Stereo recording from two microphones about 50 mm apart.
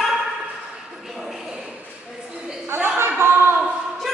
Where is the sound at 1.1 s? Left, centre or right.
Centre.